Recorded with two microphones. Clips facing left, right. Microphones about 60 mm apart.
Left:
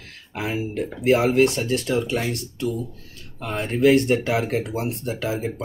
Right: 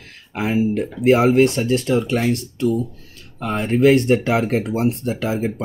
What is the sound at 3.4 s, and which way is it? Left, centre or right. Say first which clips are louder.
Speech: right 3 dB; right.